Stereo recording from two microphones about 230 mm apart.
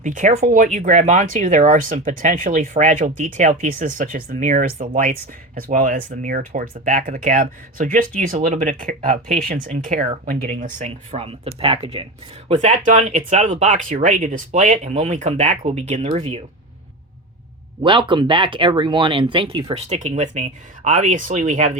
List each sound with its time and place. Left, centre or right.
0.0 s speech: right
17.8 s speech: right